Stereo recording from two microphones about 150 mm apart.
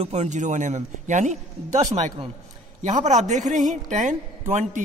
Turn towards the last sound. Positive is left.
turn(degrees=-55)  # may be behind; listen again after turning